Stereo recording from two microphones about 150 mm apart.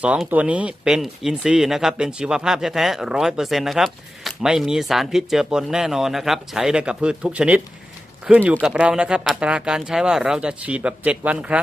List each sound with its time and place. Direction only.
0.0 s speech: 10° right (ahead or behind)